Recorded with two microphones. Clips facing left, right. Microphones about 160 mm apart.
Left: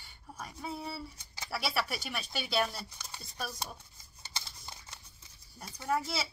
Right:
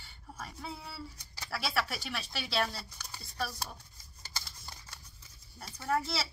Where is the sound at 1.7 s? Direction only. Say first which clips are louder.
Right 1 dB; 5° left (ahead or behind).